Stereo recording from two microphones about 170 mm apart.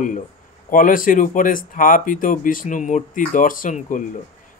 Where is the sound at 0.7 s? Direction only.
55° left (ahead or behind).